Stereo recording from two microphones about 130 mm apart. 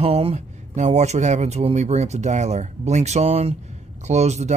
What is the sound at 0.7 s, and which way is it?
Speech, 65° right (ahead or behind).